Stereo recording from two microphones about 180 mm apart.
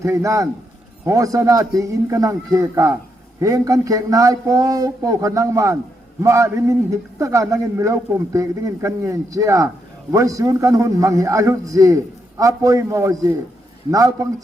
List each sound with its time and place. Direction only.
0.0 s a man's voice: 15° right (ahead or behind)